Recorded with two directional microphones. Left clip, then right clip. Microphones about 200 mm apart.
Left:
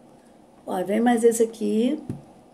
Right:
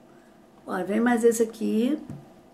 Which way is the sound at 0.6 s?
Centre (ahead or behind).